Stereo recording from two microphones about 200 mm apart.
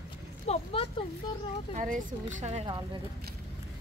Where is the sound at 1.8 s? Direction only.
40° right (ahead or behind).